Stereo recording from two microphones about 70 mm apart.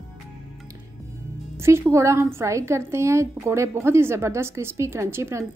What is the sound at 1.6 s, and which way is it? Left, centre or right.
A woman's voice, right.